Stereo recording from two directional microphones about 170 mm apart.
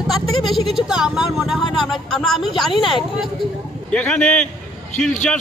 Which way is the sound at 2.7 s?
30° left (ahead or behind).